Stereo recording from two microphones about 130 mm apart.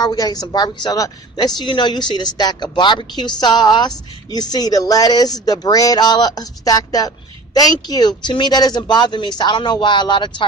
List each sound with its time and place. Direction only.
0.0 s a woman's voice: 30° left (ahead or behind)